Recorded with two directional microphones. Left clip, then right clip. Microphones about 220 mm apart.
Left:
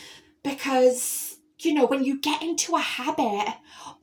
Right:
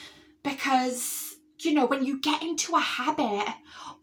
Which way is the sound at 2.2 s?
Centre (ahead or behind).